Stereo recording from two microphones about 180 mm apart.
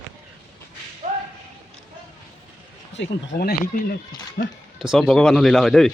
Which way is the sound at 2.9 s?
80° left.